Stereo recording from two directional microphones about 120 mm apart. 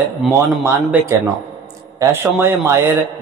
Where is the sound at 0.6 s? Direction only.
20° right (ahead or behind).